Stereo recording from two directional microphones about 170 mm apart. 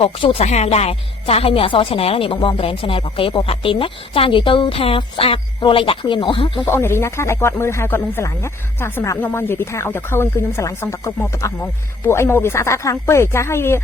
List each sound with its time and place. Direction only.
0.0 s speech: 35° left (ahead or behind)
6.7 s speech: 15° left (ahead or behind)